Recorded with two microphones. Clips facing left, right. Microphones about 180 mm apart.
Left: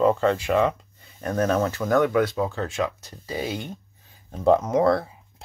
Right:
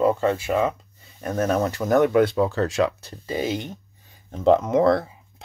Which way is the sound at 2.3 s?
70° right (ahead or behind).